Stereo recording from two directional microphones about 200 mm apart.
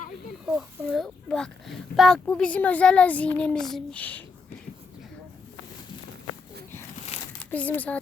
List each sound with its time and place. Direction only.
0.4 s a child's voice: centre (ahead or behind)
7.1 s crumpling: 30° left (ahead or behind)
7.5 s speech: 10° left (ahead or behind)